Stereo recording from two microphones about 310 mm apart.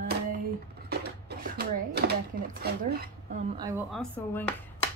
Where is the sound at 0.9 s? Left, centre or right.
Right.